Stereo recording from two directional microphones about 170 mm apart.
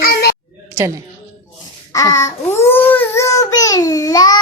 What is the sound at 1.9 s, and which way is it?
A child's voice, 20° left (ahead or behind).